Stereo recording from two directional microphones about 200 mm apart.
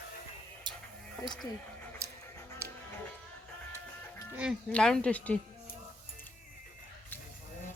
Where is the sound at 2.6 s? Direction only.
15° right (ahead or behind).